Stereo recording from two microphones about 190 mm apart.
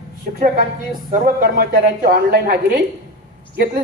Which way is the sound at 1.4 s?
50° right (ahead or behind).